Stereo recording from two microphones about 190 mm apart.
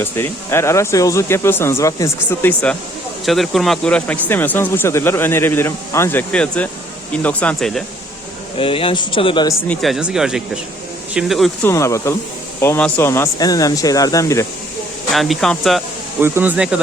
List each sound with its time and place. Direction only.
0.0 s speech: 15° left (ahead or behind)
8.5 s speech: 30° left (ahead or behind)
9.6 s speech: centre (ahead or behind)
11.7 s speech: 15° left (ahead or behind)
15.1 s speech: centre (ahead or behind)
16.2 s speech: 10° right (ahead or behind)